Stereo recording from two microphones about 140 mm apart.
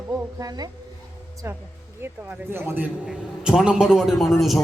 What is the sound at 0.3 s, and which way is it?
Speech, 25° right (ahead or behind).